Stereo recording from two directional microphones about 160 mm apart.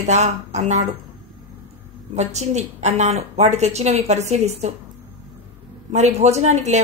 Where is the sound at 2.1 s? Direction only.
45° right (ahead or behind).